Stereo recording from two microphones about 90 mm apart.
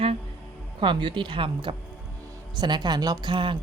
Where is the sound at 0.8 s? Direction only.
65° right (ahead or behind).